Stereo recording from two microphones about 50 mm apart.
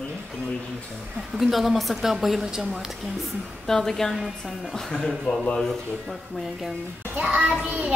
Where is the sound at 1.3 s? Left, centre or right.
Centre.